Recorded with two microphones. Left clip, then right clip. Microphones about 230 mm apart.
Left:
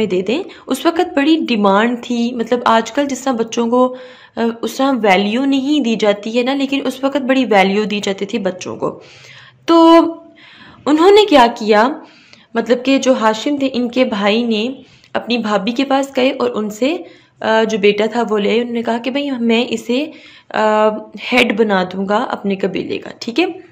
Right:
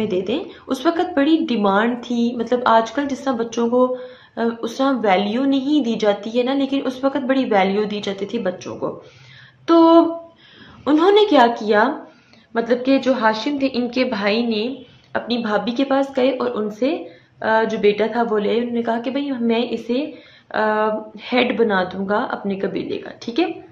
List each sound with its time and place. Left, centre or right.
0.0 s speech: left